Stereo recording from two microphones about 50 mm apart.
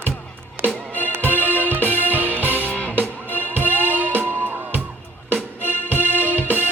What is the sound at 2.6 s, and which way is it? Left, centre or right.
Music, left.